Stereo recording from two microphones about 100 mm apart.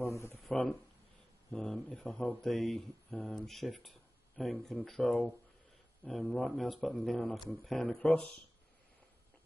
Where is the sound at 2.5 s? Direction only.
5° left (ahead or behind).